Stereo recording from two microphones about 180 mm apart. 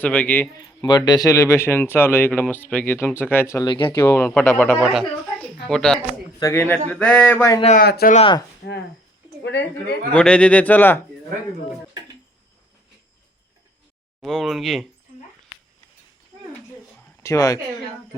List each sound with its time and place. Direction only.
0.0 s speech: 10° left (ahead or behind)
0.5 s speech: 20° left (ahead or behind)
3.9 s speech: 15° left (ahead or behind)
6.4 s speech: 15° left (ahead or behind)
7.8 s speech: 60° left (ahead or behind)
8.1 s speech: 30° left (ahead or behind)
8.6 s speech: 65° left (ahead or behind)
9.4 s speech: 75° left (ahead or behind)
10.1 s speech: 5° left (ahead or behind)
14.2 s speech: centre (ahead or behind)
17.2 s speech: 20° left (ahead or behind)